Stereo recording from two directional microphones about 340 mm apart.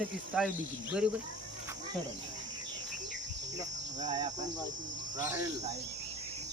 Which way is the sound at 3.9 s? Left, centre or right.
Right.